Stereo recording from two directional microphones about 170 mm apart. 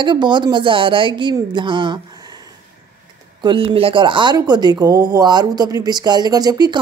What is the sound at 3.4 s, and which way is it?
A woman's voice, 30° right (ahead or behind).